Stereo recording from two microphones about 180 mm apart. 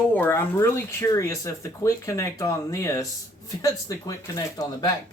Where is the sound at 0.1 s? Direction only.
10° left (ahead or behind).